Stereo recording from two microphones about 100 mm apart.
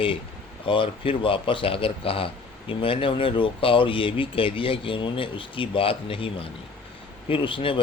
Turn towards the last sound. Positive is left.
turn(degrees=60)  # may be behind; listen again after turning